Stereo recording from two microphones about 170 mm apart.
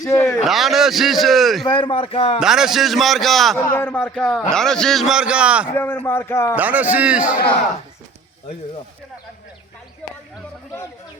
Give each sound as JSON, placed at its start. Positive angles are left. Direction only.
{"t": 0.0, "sound": "speech", "side_deg": 15}
{"t": 0.4, "sound": "a man's voice", "side_deg": 0}
{"t": 1.6, "sound": "a man's voice", "side_deg": 25}
{"t": 2.4, "sound": "a man's voice", "side_deg": -5}
{"t": 5.7, "sound": "speech", "side_deg": 10}
{"t": 6.6, "sound": "a man's voice", "side_deg": -10}